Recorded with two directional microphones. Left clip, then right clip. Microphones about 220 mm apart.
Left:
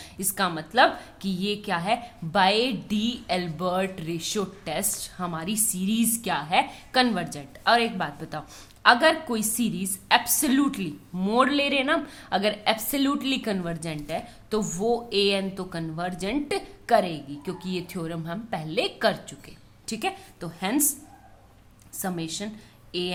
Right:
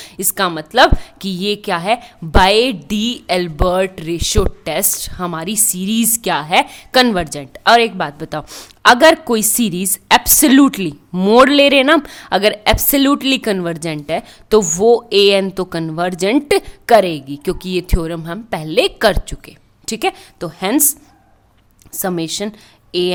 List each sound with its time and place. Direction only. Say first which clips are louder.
0.0 s a woman's voice: right 9 dB; 45° right (ahead or behind)
21.9 s a woman's voice: right 12 dB; 45° right (ahead or behind)